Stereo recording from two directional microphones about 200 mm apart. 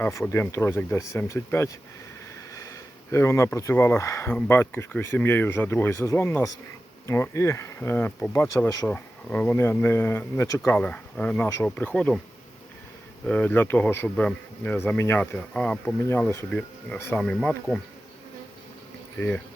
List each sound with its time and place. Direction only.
0.0 s speech: 15° left (ahead or behind)
13.2 s speech: 10° left (ahead or behind)